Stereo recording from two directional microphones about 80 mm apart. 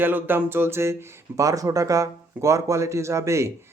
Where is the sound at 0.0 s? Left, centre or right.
Right.